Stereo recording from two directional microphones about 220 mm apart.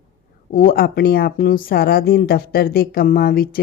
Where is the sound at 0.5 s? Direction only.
40° left (ahead or behind).